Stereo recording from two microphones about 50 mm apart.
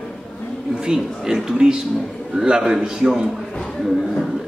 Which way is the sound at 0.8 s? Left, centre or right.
Centre.